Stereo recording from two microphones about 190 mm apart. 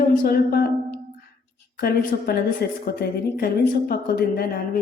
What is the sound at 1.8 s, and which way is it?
Speech, 55° left (ahead or behind).